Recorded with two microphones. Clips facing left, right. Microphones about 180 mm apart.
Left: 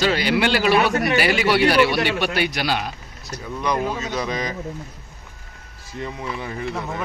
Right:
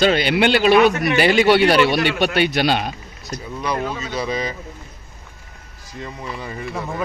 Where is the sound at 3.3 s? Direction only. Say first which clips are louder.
Even; 10° right (ahead or behind).